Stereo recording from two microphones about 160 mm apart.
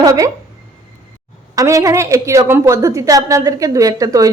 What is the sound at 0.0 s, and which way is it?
Speech, 20° right (ahead or behind).